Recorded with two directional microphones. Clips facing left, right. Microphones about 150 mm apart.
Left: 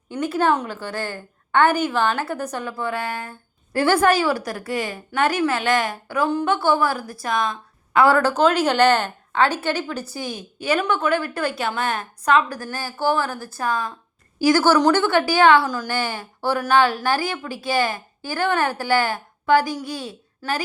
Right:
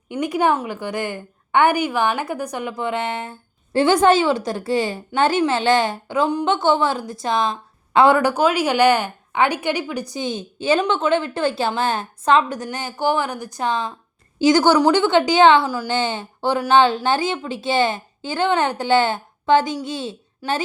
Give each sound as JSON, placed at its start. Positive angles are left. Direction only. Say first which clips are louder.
{"t": 0.1, "sound": "a woman's voice", "louder": "right 1 dB", "side_deg": -15}